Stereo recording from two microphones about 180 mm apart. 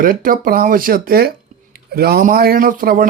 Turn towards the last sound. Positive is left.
turn(degrees=-50)  # may be behind; listen again after turning